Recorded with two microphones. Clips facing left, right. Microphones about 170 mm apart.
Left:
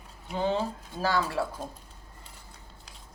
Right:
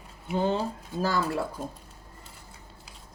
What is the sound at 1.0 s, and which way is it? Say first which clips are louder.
Speech: even; 40° right (ahead or behind).